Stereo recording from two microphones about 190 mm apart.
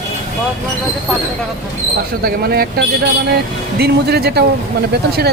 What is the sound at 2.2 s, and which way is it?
Speech, 50° right (ahead or behind).